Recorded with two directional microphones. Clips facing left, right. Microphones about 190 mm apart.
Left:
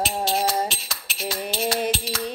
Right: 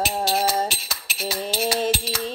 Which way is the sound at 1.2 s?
5° right (ahead or behind).